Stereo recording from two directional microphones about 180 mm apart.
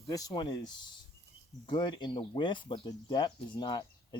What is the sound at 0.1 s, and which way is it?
Speech, 20° left (ahead or behind).